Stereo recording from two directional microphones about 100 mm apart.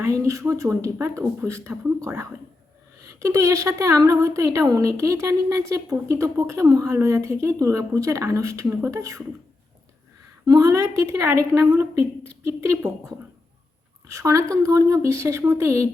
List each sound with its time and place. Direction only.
0.0 s a woman's voice: 30° right (ahead or behind)
3.2 s speech: 30° right (ahead or behind)
10.6 s a woman's voice: 30° right (ahead or behind)
14.1 s speech: 30° right (ahead or behind)